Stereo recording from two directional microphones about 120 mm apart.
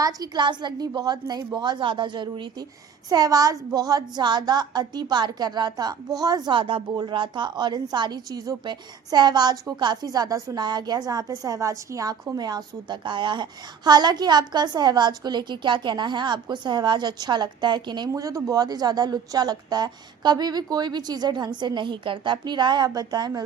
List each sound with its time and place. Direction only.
0.0 s speech: 30° right (ahead or behind)
18.1 s speech: 25° right (ahead or behind)